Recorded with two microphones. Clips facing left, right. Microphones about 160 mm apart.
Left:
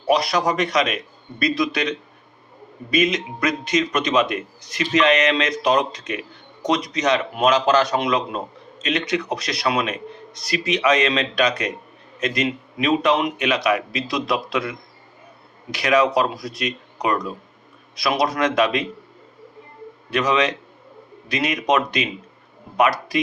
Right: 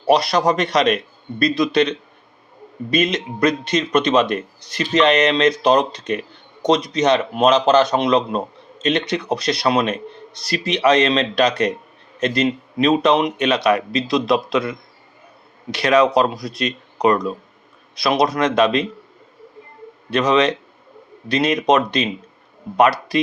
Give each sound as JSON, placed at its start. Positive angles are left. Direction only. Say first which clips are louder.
{"t": 0.0, "sound": "a man's voice", "louder": "right 3 dB", "side_deg": -30}
{"t": 3.2, "sound": "a man's voice", "louder": "right 5 dB", "side_deg": -30}
{"t": 15.8, "sound": "a man's voice", "louder": "right 3 dB", "side_deg": -30}
{"t": 20.1, "sound": "a man's voice", "louder": "right 4 dB", "side_deg": -30}